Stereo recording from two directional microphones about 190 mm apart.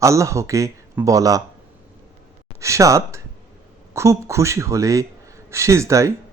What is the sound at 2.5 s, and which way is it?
Speech, 15° right (ahead or behind).